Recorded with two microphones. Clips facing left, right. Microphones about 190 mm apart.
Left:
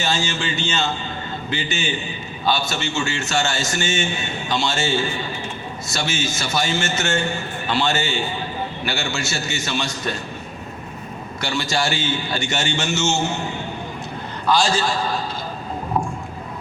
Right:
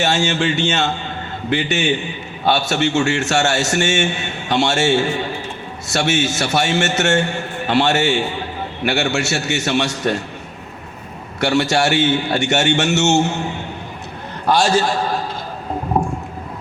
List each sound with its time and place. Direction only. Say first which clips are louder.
0.0 s a man's voice: right 6 dB; 70° right (ahead or behind)
11.3 s a man's voice: right 7 dB; 70° right (ahead or behind)
14.4 s a man's voice: right 4 dB; 65° right (ahead or behind)